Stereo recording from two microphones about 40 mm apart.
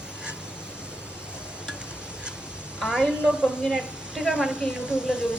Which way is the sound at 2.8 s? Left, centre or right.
Centre.